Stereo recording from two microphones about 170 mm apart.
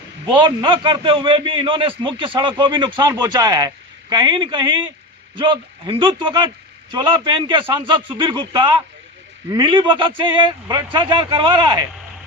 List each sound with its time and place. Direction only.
0.3 s a man's voice: 30° right (ahead or behind)